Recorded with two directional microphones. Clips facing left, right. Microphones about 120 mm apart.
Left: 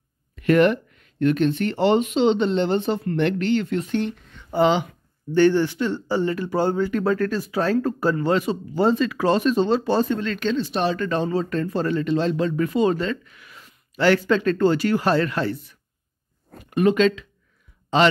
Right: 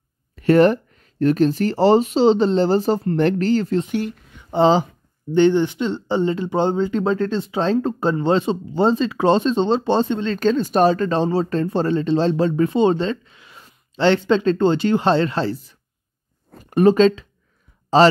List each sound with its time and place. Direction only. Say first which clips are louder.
0.4 s speech: right 3 dB; 35° right (ahead or behind)
4.0 s speech: even; 5° right (ahead or behind)
4.5 s speech: right 3 dB; 30° right (ahead or behind)
5.3 s speech: right 2 dB; 20° right (ahead or behind)
10.4 s speech: right 9 dB; 45° right (ahead or behind); by 15.5 s 30° right (ahead or behind)
16.7 s speech: right 4 dB; 35° right (ahead or behind)